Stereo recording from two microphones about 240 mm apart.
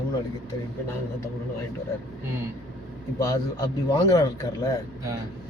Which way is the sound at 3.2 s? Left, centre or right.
Centre.